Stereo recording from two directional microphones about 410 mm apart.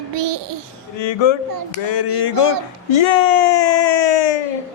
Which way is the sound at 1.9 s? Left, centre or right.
Left.